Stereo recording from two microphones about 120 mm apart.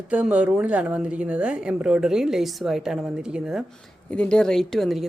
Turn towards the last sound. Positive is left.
turn(degrees=0)  # may be behind; listen again after turning